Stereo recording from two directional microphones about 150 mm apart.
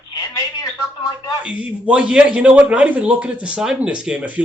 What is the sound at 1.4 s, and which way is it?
A man's voice, 10° right (ahead or behind).